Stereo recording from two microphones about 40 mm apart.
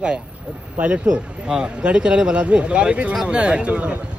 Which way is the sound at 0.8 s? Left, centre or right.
Right.